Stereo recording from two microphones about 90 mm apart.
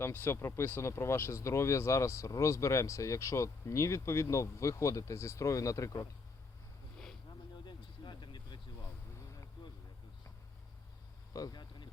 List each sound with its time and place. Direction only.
0.0 s speech: 25° left (ahead or behind)
7.6 s vehicle: 55° left (ahead or behind)
11.3 s vehicle: 50° left (ahead or behind)